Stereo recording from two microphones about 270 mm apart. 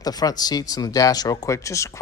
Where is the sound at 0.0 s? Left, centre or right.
Centre.